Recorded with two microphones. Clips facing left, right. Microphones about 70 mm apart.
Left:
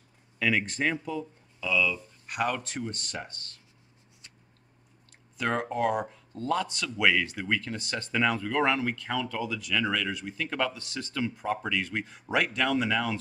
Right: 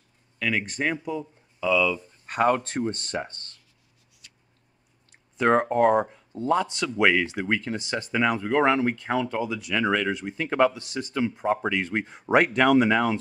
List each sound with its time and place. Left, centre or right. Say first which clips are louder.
0.4 s speech: even; centre
1.7 s speech: right 5 dB; centre
2.2 s speech: right 8 dB; right
5.4 s speech: right 8 dB; right
6.0 s speech: right 5 dB; centre